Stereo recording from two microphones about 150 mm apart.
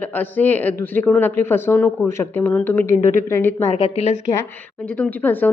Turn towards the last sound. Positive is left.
turn(degrees=10)  # may be behind; listen again after turning